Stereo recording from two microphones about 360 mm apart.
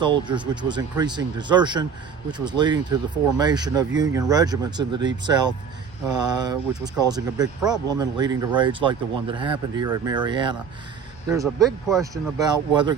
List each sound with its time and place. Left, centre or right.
0.0 s speech: centre
6.1 s speech: right
6.4 s speech: centre
12.5 s speech: centre